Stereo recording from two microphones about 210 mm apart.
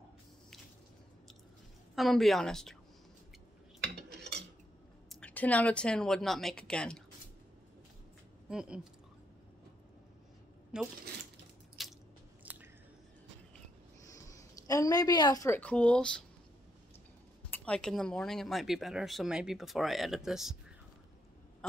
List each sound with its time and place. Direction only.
2.0 s speech: centre (ahead or behind)
3.9 s cutlery: 55° right (ahead or behind)
5.1 s speech: 5° left (ahead or behind)
8.5 s speech: 5° right (ahead or behind)
10.7 s speech: 5° right (ahead or behind)
11.8 s squish: centre (ahead or behind)
12.5 s chewing: 5° right (ahead or behind)
14.1 s a woman's voice: 15° left (ahead or behind)
17.6 s speech: 5° left (ahead or behind)